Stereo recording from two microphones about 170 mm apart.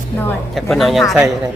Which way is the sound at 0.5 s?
Centre (ahead or behind).